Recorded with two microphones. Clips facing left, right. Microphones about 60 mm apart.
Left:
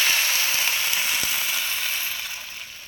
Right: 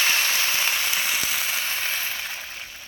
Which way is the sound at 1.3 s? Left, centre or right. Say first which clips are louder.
Even; right.